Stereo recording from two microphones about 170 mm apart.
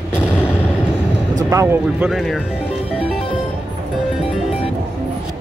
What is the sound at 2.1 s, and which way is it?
Speech, centre (ahead or behind).